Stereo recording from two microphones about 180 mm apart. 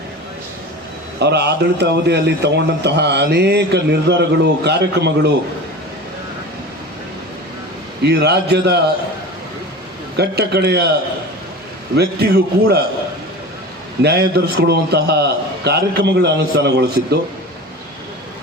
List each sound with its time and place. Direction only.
1.2 s a man's voice: 70° right (ahead or behind)
8.0 s a man's voice: 65° right (ahead or behind)
10.2 s a man's voice: 65° right (ahead or behind)
11.9 s a man's voice: 60° right (ahead or behind)
14.0 s a man's voice: 65° right (ahead or behind)